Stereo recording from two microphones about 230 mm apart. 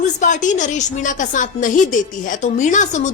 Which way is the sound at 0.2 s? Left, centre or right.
Left.